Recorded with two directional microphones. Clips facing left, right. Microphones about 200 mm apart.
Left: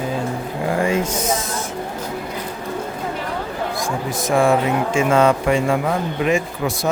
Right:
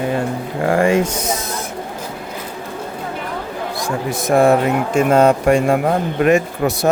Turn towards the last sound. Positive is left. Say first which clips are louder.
# right 5 dB
turn(degrees=-65)  # may be behind; listen again after turning